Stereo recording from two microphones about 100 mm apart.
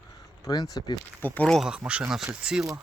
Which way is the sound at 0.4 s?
40° left (ahead or behind).